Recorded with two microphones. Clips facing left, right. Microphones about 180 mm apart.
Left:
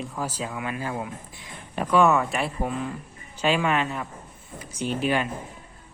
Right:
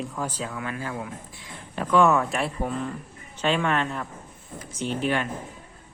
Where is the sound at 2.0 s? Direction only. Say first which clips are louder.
Even; centre (ahead or behind).